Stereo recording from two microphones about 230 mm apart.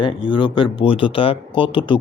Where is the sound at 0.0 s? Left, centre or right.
Left.